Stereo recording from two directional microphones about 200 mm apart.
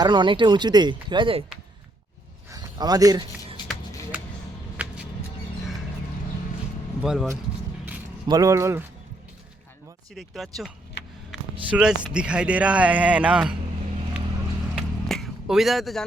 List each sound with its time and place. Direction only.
0.0 s speech: 20° right (ahead or behind)
2.5 s a sound: 20° right (ahead or behind)
4.8 s music: 5° right (ahead or behind)
7.0 s speech: centre (ahead or behind)
8.3 s speech: 15° right (ahead or behind)
10.2 s speech: centre (ahead or behind)
11.7 s speech: 5° right (ahead or behind)
14.8 s music: centre (ahead or behind)